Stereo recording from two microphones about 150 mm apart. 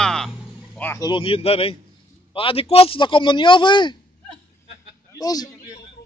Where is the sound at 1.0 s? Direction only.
35° left (ahead or behind).